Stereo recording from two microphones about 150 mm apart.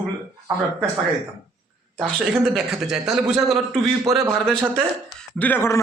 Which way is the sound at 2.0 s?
Centre (ahead or behind).